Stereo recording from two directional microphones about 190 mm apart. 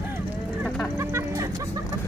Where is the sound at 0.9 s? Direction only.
15° right (ahead or behind).